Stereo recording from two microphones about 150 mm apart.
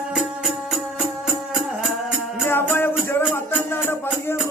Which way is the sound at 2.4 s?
15° left (ahead or behind).